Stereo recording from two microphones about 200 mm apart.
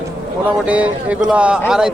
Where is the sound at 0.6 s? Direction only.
5° right (ahead or behind).